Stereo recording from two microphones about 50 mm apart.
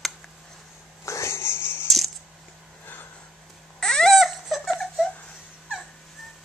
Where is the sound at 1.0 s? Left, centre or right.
Left.